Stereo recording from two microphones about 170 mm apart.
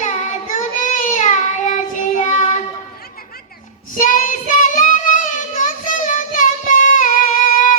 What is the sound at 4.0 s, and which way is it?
Child singing, 50° left (ahead or behind).